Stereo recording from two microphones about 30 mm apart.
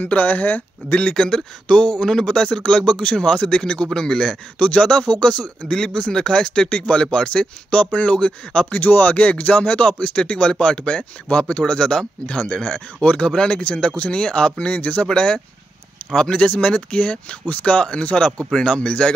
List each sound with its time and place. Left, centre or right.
0.0 s speech: left
1.1 s speech: left
5.7 s speech: left
7.8 s speech: left
8.7 s speech: left
9.1 s speech: left
9.4 s speech: left
12.6 s speech: left
13.3 s speech: left
18.1 s speech: left
18.6 s speech: left